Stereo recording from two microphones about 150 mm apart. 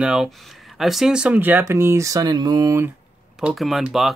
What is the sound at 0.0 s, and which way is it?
Speech, 5° right (ahead or behind).